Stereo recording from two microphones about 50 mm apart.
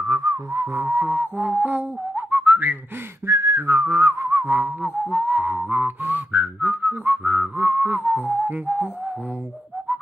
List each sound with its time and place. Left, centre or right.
0.0 s whistling: right
0.9 s whistling: right
3.3 s whistling: right
5.1 s whistling: right